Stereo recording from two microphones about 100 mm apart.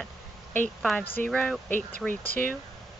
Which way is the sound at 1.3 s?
10° left (ahead or behind).